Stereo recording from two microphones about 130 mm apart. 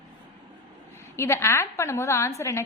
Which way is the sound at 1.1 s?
20° left (ahead or behind).